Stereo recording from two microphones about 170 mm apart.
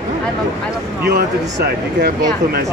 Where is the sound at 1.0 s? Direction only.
75° right (ahead or behind).